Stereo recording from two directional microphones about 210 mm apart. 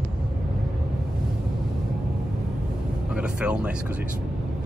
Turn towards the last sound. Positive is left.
turn(degrees=-5)  # may be behind; listen again after turning